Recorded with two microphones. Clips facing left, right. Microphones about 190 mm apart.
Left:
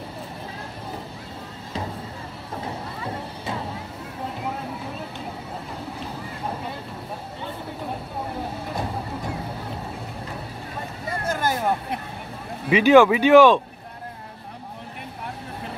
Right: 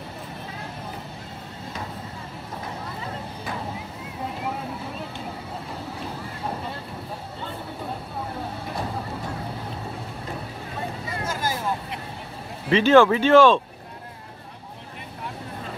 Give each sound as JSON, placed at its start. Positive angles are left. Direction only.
{"t": 11.1, "sound": "vehicle", "side_deg": 60}
{"t": 12.6, "sound": "speech", "side_deg": 15}